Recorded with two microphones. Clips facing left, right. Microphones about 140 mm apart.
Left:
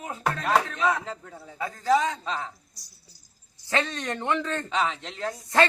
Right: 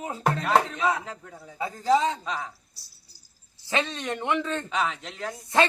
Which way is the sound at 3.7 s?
20° right (ahead or behind).